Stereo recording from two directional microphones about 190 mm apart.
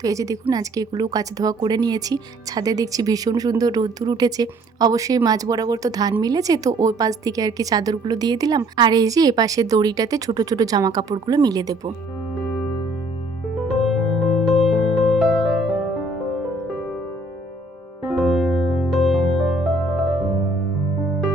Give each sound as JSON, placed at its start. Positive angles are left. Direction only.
{"t": 0.0, "sound": "a woman's voice", "side_deg": -15}
{"t": 13.7, "sound": "music", "side_deg": 0}
{"t": 18.0, "sound": "music", "side_deg": 0}